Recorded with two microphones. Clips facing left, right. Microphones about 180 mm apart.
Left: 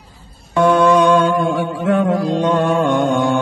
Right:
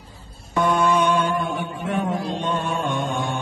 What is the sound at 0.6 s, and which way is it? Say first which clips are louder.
Music: left 7 dB; 75° left (ahead or behind).